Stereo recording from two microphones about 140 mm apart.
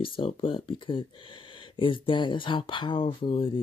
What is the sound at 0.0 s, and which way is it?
Speech, 40° left (ahead or behind).